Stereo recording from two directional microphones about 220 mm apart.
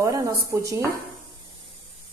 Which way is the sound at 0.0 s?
15° right (ahead or behind).